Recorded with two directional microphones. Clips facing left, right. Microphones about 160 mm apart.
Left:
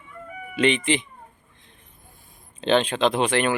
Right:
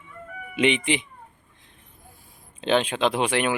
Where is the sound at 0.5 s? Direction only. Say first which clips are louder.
Left 1 dB; 15° right (ahead or behind).